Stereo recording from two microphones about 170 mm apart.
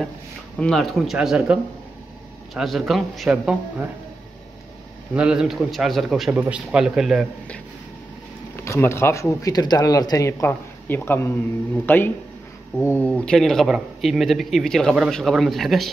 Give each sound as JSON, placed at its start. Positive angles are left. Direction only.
{"t": 0.6, "sound": "speech", "side_deg": 0}
{"t": 5.1, "sound": "speech", "side_deg": -5}
{"t": 8.5, "sound": "speech", "side_deg": 15}